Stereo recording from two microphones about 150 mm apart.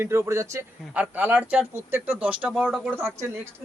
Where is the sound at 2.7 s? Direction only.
Centre (ahead or behind).